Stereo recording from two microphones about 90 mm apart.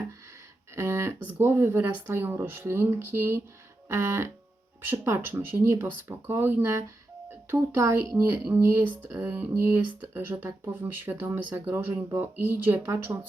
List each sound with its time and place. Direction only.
0.8 s a woman's voice: 30° right (ahead or behind)